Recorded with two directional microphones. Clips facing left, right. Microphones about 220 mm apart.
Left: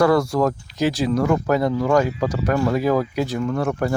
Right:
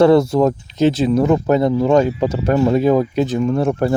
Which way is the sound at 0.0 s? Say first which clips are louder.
Right 5 dB; 25° right (ahead or behind).